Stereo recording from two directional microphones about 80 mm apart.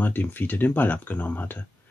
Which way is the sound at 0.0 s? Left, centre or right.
Left.